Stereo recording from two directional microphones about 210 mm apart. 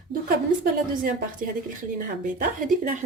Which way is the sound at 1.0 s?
40° right (ahead or behind).